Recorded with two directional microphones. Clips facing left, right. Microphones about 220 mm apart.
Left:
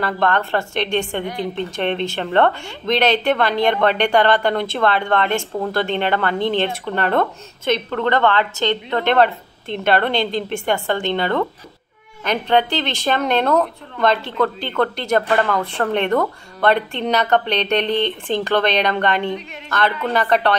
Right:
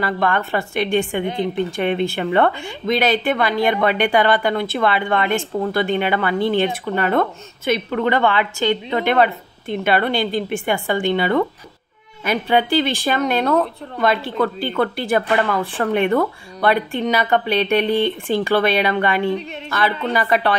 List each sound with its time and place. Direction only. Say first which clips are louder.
0.0 s speech: even; 5° right (ahead or behind)
1.2 s a woman's voice: right 3 dB; 20° right (ahead or behind)
1.5 s speech: right 2 dB; 10° right (ahead or behind)